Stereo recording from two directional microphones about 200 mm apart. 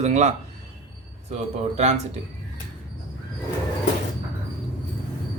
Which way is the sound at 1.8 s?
35° right (ahead or behind).